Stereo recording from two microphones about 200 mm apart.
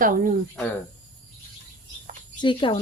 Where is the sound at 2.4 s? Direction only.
25° left (ahead or behind).